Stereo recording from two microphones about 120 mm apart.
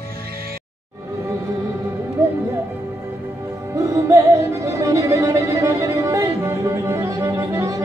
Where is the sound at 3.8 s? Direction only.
25° right (ahead or behind).